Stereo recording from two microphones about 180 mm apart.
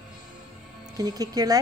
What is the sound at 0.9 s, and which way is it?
Speech, 20° right (ahead or behind).